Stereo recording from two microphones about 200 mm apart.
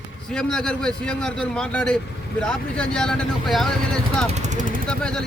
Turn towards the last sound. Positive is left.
turn(degrees=5)  # may be behind; listen again after turning